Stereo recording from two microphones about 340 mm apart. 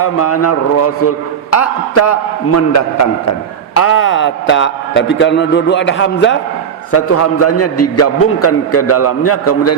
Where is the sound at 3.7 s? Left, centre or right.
Left.